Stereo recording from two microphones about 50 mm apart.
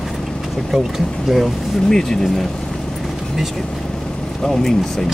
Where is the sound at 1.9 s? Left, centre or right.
Centre.